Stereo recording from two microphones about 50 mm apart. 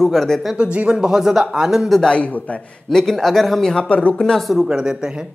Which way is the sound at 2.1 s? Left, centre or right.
Left.